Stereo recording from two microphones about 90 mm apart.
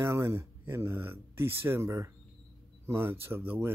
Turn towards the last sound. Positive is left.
turn(degrees=-25)  # may be behind; listen again after turning